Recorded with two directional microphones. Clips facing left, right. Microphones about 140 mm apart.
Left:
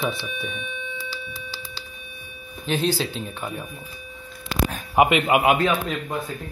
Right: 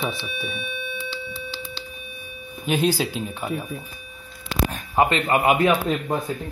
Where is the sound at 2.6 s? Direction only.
10° right (ahead or behind).